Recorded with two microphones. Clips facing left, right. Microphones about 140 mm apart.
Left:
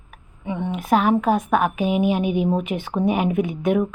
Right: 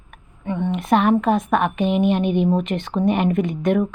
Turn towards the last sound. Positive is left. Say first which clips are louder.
# right 1 dB
turn(degrees=5)  # may be behind; listen again after turning